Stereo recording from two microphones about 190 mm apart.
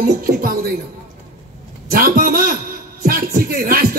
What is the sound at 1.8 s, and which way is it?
Music, 50° right (ahead or behind).